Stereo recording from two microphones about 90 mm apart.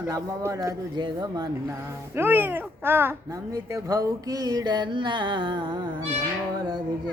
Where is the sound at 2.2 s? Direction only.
25° right (ahead or behind).